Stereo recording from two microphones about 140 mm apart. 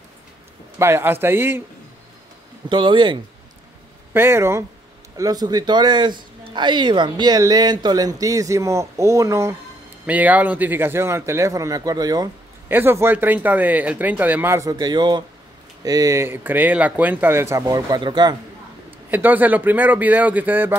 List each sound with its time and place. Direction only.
0.7 s speech: 15° right (ahead or behind)
2.7 s speech: 35° right (ahead or behind)
4.1 s speech: 15° right (ahead or behind)
12.6 s speech: 15° right (ahead or behind)
19.0 s speech: 15° right (ahead or behind)